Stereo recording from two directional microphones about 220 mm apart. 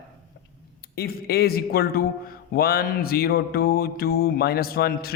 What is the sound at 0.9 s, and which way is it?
A man's voice, 45° left (ahead or behind).